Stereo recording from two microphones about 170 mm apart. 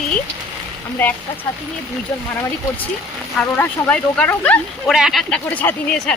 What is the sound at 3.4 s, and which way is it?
Speech, 5° left (ahead or behind).